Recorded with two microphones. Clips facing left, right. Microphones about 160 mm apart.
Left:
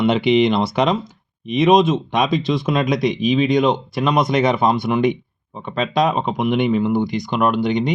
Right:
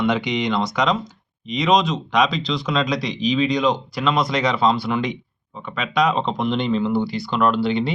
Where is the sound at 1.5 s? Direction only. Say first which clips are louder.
Left 5 dB; 55° left (ahead or behind).